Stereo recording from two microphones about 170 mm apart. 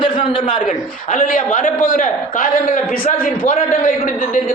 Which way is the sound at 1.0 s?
50° left (ahead or behind).